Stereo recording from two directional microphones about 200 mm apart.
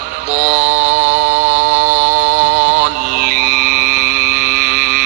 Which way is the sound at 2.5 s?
45° right (ahead or behind).